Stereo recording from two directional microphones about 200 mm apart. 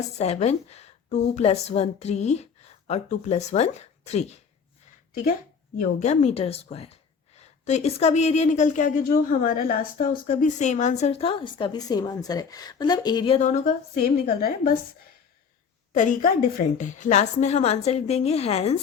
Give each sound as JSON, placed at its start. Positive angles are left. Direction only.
{"t": 0.2, "sound": "a woman's voice", "side_deg": 35}
{"t": 5.8, "sound": "a woman's voice", "side_deg": 35}
{"t": 13.5, "sound": "speech", "side_deg": 45}
{"t": 15.9, "sound": "a woman's voice", "side_deg": 40}